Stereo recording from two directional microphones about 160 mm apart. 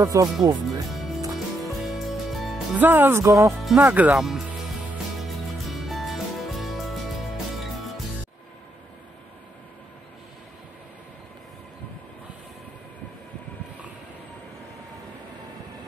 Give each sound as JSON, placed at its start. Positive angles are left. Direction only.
{"t": 0.0, "sound": "speech", "side_deg": -20}
{"t": 0.8, "sound": "music", "side_deg": 0}
{"t": 2.8, "sound": "speech", "side_deg": -15}
{"t": 5.2, "sound": "music", "side_deg": 0}